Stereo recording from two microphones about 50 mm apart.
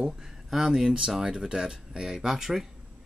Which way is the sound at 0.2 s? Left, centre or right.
Centre.